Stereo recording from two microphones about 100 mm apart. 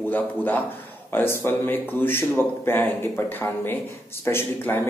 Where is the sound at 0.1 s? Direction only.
20° left (ahead or behind).